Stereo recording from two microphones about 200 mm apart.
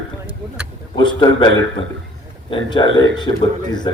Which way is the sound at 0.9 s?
25° left (ahead or behind).